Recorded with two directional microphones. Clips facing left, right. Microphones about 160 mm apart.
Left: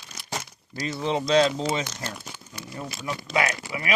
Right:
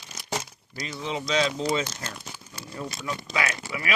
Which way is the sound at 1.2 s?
40° left (ahead or behind).